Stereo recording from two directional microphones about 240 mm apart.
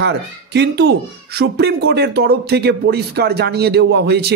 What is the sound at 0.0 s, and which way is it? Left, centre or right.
Speech, right.